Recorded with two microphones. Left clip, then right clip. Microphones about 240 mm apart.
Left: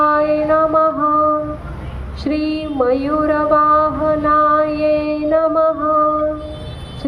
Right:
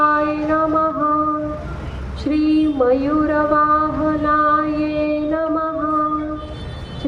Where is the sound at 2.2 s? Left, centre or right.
Left.